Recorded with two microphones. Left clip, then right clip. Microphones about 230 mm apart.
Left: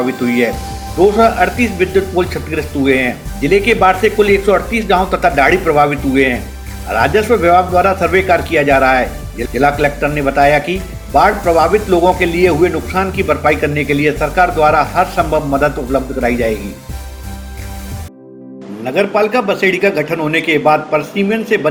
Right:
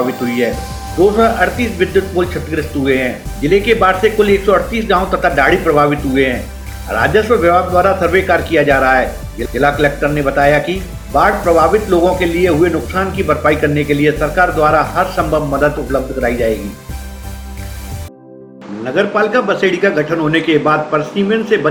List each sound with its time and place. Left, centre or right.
0.1 s speech: centre
1.1 s speech: left
18.9 s speech: left